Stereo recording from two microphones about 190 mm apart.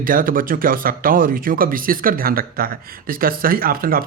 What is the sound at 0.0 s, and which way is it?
Speech, 45° right (ahead or behind).